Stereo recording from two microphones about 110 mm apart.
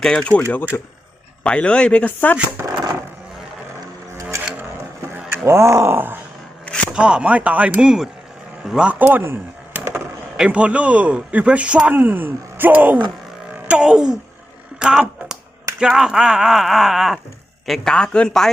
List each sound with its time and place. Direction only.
0.0 s speech: 5° left (ahead or behind)
0.7 s speech: 25° left (ahead or behind)
1.5 s speech: 10° left (ahead or behind)
2.6 s a sound: 20° right (ahead or behind)
4.2 s vehicle: 25° right (ahead or behind)
5.5 s groan: 25° right (ahead or behind)
6.9 s speech: 10° right (ahead or behind)
14.8 s a sound: 5° right (ahead or behind)
15.8 s speech: 5° right (ahead or behind)